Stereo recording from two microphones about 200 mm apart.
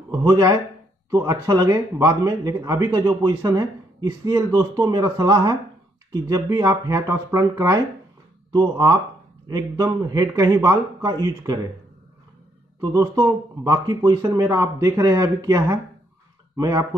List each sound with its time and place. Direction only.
0.1 s a man's voice: 20° right (ahead or behind)
12.8 s a man's voice: 15° right (ahead or behind)